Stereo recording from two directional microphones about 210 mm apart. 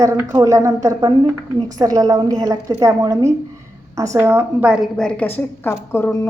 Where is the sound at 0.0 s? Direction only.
15° right (ahead or behind).